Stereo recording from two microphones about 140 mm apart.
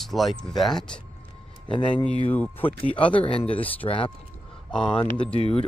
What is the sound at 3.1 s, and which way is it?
Speech, 40° left (ahead or behind).